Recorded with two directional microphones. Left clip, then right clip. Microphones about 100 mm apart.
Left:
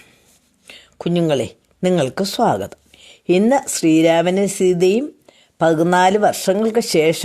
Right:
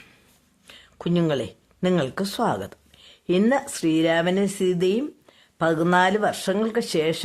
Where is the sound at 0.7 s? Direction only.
40° left (ahead or behind).